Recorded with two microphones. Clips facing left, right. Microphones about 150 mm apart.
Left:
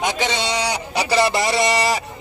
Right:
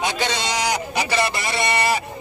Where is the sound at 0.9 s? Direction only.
30° left (ahead or behind).